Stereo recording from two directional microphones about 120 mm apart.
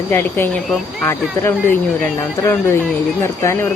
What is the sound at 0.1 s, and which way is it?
Speech, 20° left (ahead or behind).